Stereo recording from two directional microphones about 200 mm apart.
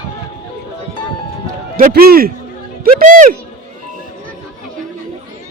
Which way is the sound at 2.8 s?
45° right (ahead or behind).